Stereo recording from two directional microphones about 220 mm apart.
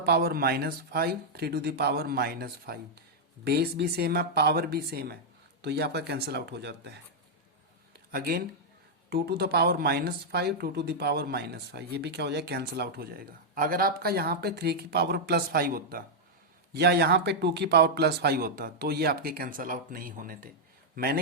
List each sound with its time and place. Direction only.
0.0 s speech: 45° right (ahead or behind)